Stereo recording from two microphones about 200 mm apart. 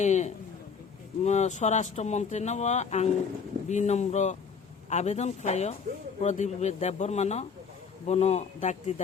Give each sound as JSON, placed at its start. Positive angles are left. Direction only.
{"t": 0.0, "sound": "speech", "side_deg": 35}